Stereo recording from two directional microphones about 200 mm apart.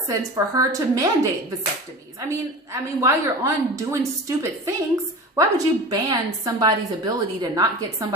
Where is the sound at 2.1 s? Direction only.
15° right (ahead or behind).